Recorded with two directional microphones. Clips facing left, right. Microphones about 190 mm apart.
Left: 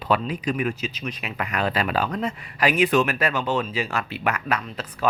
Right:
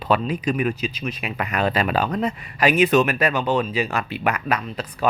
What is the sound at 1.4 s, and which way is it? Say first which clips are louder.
Speech: right 3 dB; 20° right (ahead or behind).